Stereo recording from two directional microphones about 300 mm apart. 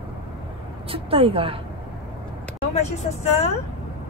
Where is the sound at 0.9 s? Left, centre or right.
Centre.